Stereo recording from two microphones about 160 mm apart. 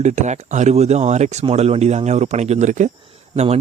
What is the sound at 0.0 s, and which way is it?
Speech, 45° right (ahead or behind).